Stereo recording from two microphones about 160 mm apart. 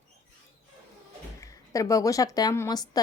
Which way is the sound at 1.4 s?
20° left (ahead or behind).